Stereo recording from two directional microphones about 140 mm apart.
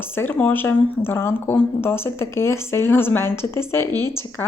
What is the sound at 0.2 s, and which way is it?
Speech, 15° left (ahead or behind).